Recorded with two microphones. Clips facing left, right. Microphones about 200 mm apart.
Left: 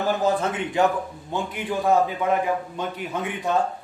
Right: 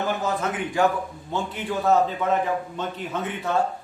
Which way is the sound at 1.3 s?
15° left (ahead or behind).